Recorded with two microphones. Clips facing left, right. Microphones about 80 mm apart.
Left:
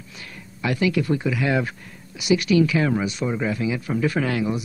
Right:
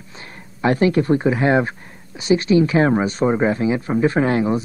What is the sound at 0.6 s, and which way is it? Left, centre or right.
Speech, right.